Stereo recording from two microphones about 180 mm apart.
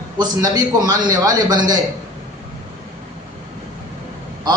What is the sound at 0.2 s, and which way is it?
A man's voice, 20° right (ahead or behind).